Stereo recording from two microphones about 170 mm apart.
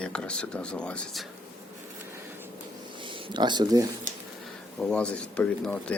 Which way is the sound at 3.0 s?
25° right (ahead or behind).